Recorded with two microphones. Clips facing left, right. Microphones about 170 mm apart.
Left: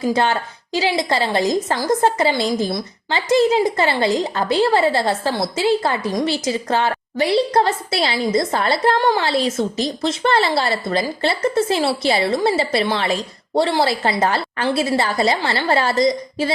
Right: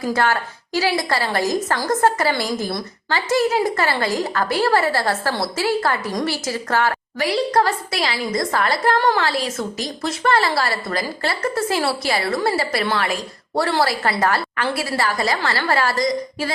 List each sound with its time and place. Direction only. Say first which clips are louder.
0.1 s a woman's voice: right 1 dB; 20° left (ahead or behind)
9.0 s a woman's voice: left 1 dB; 15° left (ahead or behind)
9.2 s a woman's voice: left 4 dB; 25° left (ahead or behind)